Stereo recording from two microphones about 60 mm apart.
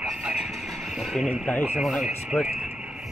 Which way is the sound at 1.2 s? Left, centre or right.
Left.